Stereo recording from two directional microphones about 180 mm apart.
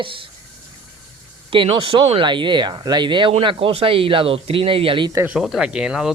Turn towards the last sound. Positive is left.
turn(degrees=-5)  # may be behind; listen again after turning